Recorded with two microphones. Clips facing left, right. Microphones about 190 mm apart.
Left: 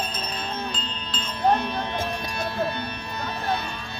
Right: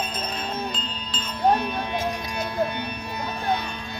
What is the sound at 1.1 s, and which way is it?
Music, 10° right (ahead or behind).